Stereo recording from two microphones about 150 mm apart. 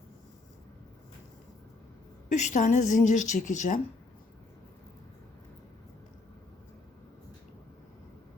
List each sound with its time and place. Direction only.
2.3 s a woman's voice: 55° left (ahead or behind)